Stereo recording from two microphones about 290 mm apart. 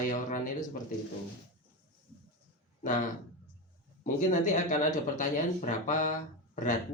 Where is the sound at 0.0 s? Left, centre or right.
Left.